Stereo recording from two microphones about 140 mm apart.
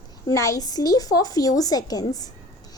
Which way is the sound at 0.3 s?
25° left (ahead or behind).